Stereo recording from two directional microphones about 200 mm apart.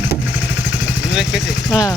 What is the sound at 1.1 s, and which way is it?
Speech, centre (ahead or behind).